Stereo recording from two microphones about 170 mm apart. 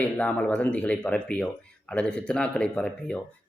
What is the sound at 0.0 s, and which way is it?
A man's voice, 10° left (ahead or behind).